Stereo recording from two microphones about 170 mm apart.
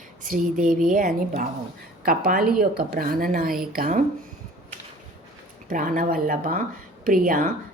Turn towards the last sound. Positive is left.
turn(degrees=-55)  # may be behind; listen again after turning